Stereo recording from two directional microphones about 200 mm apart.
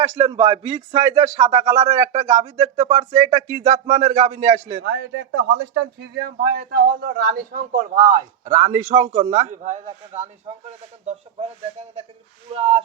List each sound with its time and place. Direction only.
0.0 s a man's voice: 30° right (ahead or behind)
4.8 s a man's voice: 55° right (ahead or behind); by 11.4 s 30° right (ahead or behind)
12.5 s speech: 30° right (ahead or behind)